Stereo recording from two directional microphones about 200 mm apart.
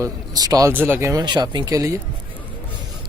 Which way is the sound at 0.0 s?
20° right (ahead or behind).